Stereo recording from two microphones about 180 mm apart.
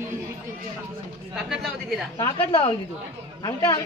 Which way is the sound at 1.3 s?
Centre (ahead or behind).